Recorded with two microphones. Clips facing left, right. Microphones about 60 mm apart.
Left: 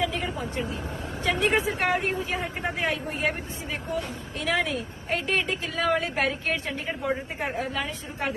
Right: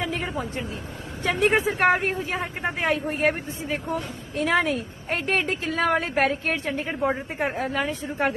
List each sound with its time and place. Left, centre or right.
0.0 s vehicle: right
1.2 s speech: right